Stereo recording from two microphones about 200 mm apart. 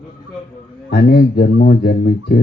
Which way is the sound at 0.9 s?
55° left (ahead or behind).